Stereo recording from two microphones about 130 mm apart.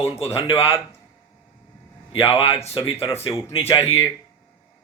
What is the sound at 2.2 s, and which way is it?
Speech, 45° left (ahead or behind).